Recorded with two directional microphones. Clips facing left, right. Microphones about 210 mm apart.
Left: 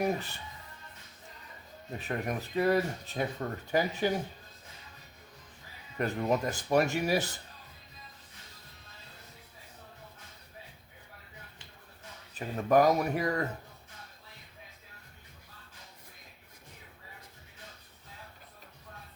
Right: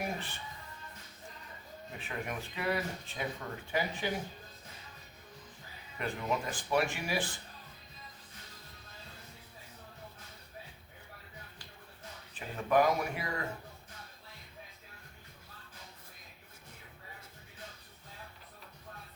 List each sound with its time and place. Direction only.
0.0 s speech: 40° left (ahead or behind)
2.0 s speech: 40° left (ahead or behind)
6.0 s speech: 40° left (ahead or behind)
12.3 s speech: 40° left (ahead or behind)